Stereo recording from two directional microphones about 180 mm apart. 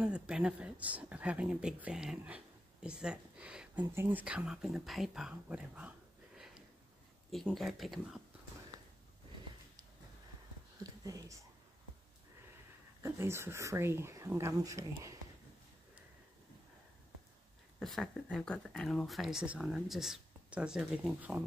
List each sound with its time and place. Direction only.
0.0 s speech: 5° right (ahead or behind)
10.8 s a sound: 20° right (ahead or behind)
13.0 s speech: 15° right (ahead or behind)
17.7 s speech: centre (ahead or behind)